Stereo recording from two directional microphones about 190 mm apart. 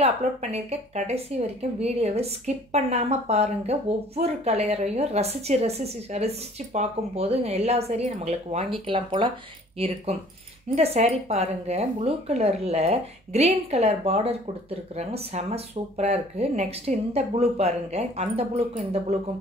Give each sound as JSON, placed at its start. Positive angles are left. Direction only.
{"t": 0.0, "sound": "a woman's voice", "side_deg": -35}